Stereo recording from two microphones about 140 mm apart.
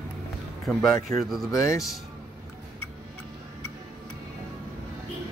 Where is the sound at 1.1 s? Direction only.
25° left (ahead or behind).